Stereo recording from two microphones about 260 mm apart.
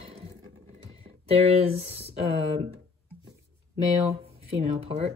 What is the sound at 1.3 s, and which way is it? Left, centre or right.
Speech, right.